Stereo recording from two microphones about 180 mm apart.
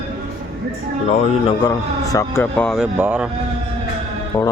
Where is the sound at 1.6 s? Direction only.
20° left (ahead or behind).